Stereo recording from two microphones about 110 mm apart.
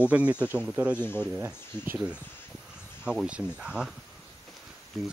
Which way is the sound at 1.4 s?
20° right (ahead or behind).